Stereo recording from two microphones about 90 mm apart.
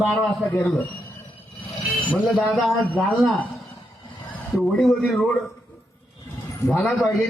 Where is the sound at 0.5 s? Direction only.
20° left (ahead or behind).